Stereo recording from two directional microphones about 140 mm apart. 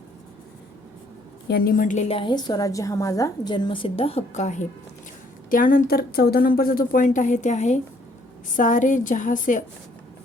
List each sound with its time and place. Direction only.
1.5 s a woman's voice: 85° left; by 2.0 s 65° left (ahead or behind)
2.0 s a woman's voice: 35° left (ahead or behind); by 4.6 s 60° left (ahead or behind)
5.5 s a woman's voice: 80° left